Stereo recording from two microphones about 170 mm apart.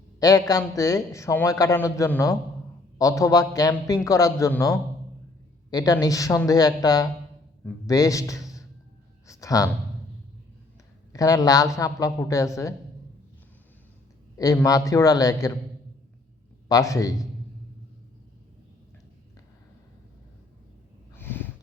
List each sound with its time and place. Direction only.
0.2 s a man's voice: 20° left (ahead or behind)
9.2 s a sound: 20° left (ahead or behind)
11.1 s a man's voice: 20° left (ahead or behind)
14.3 s a man's voice: 20° left (ahead or behind)
16.6 s a man's voice: 20° left (ahead or behind)
21.2 s a sound: 10° left (ahead or behind)